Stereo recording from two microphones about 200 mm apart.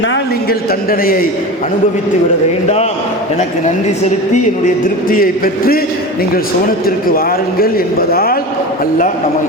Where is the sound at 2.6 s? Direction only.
35° left (ahead or behind).